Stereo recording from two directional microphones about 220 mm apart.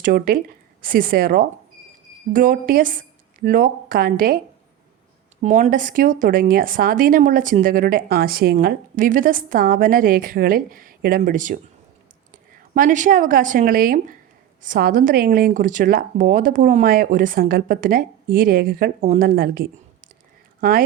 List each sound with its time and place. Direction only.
0.0 s a woman's voice: 40° right (ahead or behind)
5.4 s a woman's voice: 35° right (ahead or behind)